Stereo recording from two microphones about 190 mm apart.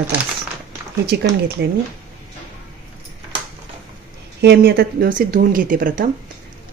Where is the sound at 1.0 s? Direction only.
55° right (ahead or behind).